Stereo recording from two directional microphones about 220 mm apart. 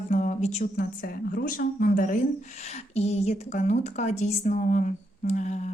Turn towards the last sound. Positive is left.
turn(degrees=35)  # may be behind; listen again after turning